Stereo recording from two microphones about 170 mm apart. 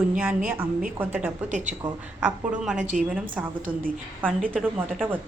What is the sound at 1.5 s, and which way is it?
Speech, 45° right (ahead or behind).